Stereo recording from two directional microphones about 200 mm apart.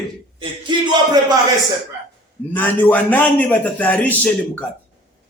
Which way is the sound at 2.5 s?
10° left (ahead or behind).